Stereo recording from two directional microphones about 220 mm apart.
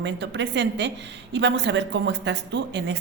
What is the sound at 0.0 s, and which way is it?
A woman's voice, 55° right (ahead or behind).